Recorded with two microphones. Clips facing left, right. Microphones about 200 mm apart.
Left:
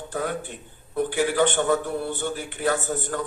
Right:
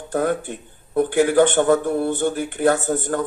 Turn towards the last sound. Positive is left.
turn(degrees=-50)  # may be behind; listen again after turning